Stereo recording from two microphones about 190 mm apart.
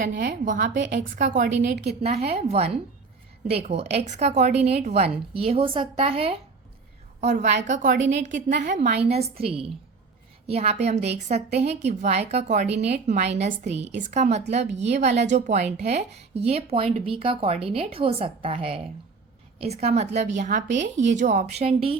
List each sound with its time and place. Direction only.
0.1 s a woman's voice: 70° right (ahead or behind)
0.4 s a woman's voice: 45° right (ahead or behind); by 21.9 s 30° right (ahead or behind)